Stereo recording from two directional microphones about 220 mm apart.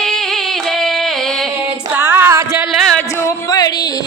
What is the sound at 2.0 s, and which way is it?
Music, 10° right (ahead or behind).